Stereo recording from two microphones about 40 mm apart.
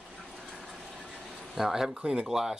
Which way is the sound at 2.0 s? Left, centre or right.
Right.